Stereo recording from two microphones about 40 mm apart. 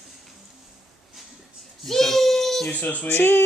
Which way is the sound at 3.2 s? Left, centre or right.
Left.